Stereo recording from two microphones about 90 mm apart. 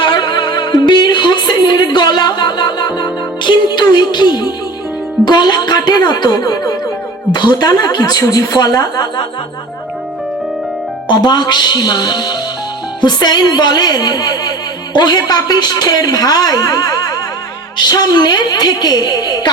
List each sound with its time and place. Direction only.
0.0 s a woman's voice: 55° left (ahead or behind)
11.1 s a woman's voice: 50° left (ahead or behind)